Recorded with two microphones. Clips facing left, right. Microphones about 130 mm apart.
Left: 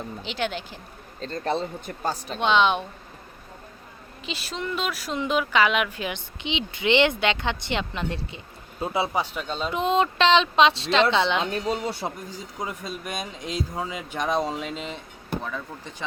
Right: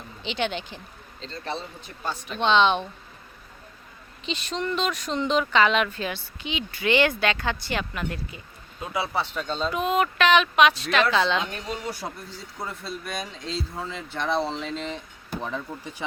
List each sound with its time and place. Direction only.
0.2 s speech: 5° left (ahead or behind)
1.2 s a woman's voice: 50° left (ahead or behind)
2.4 s speech: 10° left (ahead or behind)
4.3 s speech: 5° left (ahead or behind); by 9.0 s 25° left (ahead or behind)
9.1 s speech: 10° left (ahead or behind)
9.6 s speech: 25° left (ahead or behind); by 15.0 s 5° left (ahead or behind)
15.4 s speech: 20° right (ahead or behind)